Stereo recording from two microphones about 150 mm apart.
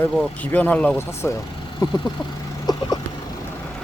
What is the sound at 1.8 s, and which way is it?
Speech, 30° left (ahead or behind).